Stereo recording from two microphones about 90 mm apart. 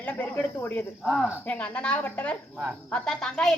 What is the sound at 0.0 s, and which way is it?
Speech, 20° left (ahead or behind).